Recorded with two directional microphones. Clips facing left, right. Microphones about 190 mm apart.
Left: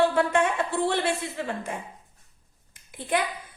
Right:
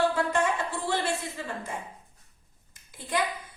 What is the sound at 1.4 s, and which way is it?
Speech, 65° left (ahead or behind).